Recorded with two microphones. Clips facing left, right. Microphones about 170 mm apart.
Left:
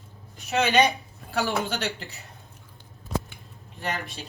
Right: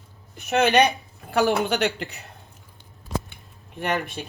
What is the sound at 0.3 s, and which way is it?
A woman's voice, 60° right (ahead or behind).